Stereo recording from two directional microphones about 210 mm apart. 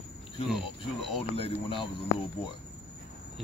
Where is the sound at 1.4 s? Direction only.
25° left (ahead or behind).